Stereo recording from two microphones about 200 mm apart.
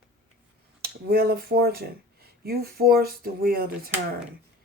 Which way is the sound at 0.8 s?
50° right (ahead or behind).